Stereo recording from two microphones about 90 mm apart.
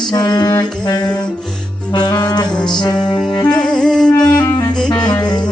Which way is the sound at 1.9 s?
50° left (ahead or behind).